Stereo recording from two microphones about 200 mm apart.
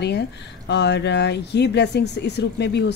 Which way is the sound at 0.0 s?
55° left (ahead or behind).